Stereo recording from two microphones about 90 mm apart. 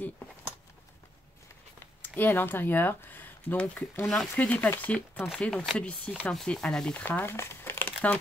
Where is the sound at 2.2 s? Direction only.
20° left (ahead or behind).